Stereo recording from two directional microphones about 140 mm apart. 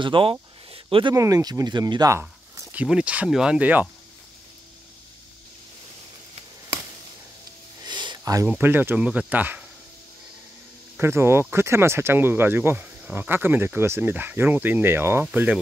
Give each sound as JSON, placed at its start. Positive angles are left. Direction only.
{"t": 0.0, "sound": "a sound", "side_deg": -40}
{"t": 1.1, "sound": "speech", "side_deg": -25}
{"t": 2.1, "sound": "speech", "side_deg": -15}
{"t": 7.8, "sound": "a sound", "side_deg": -35}
{"t": 8.5, "sound": "speech", "side_deg": -15}
{"t": 11.0, "sound": "speech", "side_deg": -20}